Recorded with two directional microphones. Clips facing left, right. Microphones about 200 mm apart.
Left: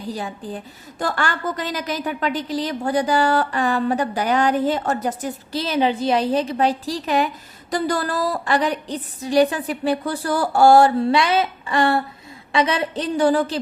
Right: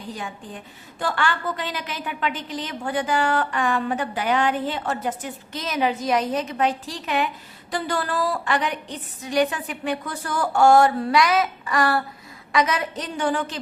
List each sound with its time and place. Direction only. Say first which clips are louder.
0.1 s a woman's voice: left 6 dB; 35° left (ahead or behind)